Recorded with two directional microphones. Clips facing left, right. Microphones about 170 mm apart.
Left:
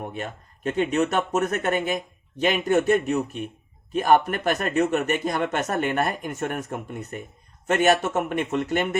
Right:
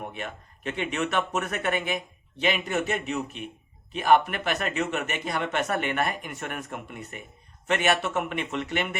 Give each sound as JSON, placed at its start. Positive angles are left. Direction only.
{"t": 0.1, "sound": "speech", "side_deg": 45}